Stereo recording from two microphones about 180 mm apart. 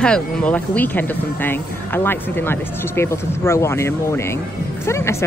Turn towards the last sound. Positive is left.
turn(degrees=15)  # may be behind; listen again after turning